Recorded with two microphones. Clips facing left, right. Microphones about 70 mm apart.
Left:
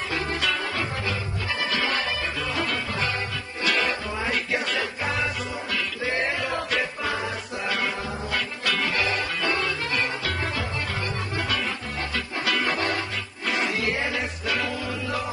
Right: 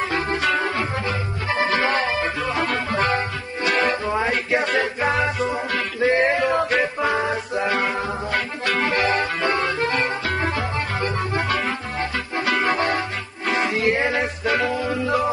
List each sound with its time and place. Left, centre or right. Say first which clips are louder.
0.1 s music: right 2 dB; right